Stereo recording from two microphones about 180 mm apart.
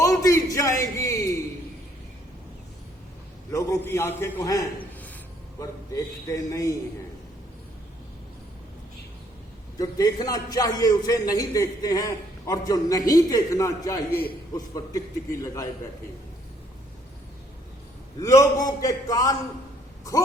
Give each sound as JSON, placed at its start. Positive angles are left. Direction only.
{"t": 0.0, "sound": "a sound", "side_deg": 20}
{"t": 3.5, "sound": "a man's voice", "side_deg": 15}
{"t": 9.7, "sound": "a man's voice", "side_deg": 20}
{"t": 14.1, "sound": "a man's voice", "side_deg": 60}
{"t": 14.5, "sound": "a man's voice", "side_deg": 20}
{"t": 18.2, "sound": "a man's voice", "side_deg": 20}